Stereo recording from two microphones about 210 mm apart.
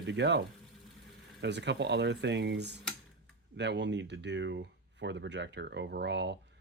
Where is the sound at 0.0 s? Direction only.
55° right (ahead or behind).